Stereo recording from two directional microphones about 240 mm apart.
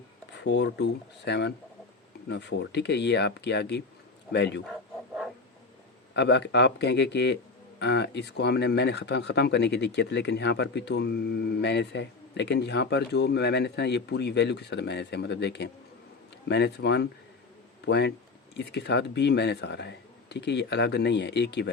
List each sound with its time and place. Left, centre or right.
0.4 s speech: left
6.1 s speech: left